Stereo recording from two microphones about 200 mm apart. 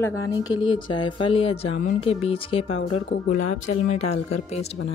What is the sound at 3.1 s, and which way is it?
Speech, 35° left (ahead or behind).